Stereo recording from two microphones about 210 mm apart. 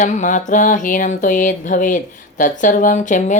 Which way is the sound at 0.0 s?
35° left (ahead or behind).